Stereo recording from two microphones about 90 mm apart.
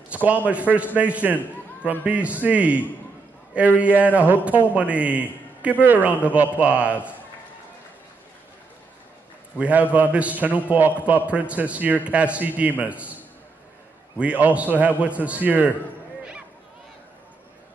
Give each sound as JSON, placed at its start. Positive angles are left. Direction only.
{"t": 0.1, "sound": "a man's voice", "side_deg": -15}
{"t": 9.6, "sound": "a man's voice", "side_deg": -15}